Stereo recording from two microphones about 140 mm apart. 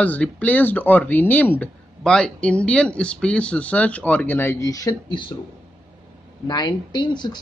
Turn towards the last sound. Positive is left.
turn(degrees=30)  # may be behind; listen again after turning